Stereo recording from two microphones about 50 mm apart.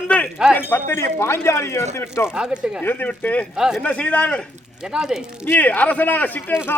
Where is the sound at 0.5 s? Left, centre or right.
Left.